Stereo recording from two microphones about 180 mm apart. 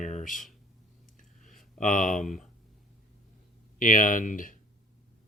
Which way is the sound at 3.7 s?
45° left (ahead or behind).